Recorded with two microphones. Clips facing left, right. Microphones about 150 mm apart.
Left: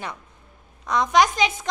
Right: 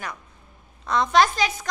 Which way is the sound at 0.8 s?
15° left (ahead or behind).